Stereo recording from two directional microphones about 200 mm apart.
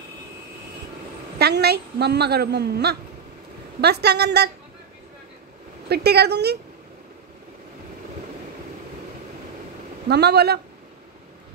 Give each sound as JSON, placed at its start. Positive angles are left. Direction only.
{"t": 1.4, "sound": "a woman's voice", "side_deg": -55}
{"t": 5.9, "sound": "a woman's voice", "side_deg": -55}
{"t": 10.0, "sound": "speech", "side_deg": -55}